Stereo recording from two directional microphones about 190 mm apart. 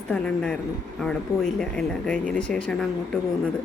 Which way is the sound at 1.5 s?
5° left (ahead or behind).